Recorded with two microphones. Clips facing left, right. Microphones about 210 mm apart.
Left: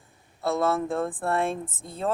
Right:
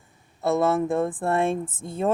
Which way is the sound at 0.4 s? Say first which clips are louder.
Right 3 dB; 20° right (ahead or behind).